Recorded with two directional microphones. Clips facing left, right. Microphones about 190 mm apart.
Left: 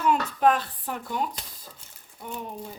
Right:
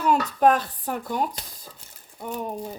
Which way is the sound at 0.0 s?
40° right (ahead or behind).